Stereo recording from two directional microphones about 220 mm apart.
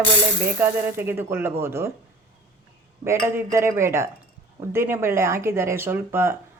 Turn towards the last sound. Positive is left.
turn(degrees=-10)  # may be behind; listen again after turning